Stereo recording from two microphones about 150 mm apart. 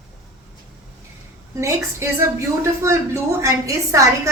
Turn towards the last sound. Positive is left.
turn(degrees=-20)  # may be behind; listen again after turning